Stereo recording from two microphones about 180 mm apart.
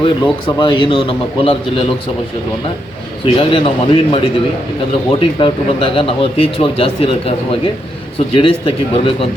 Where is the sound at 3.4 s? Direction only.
30° left (ahead or behind).